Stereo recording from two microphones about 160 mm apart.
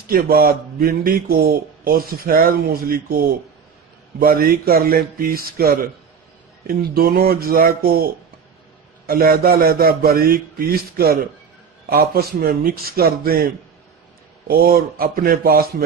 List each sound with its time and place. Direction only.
0.1 s a man's voice: 70° right (ahead or behind)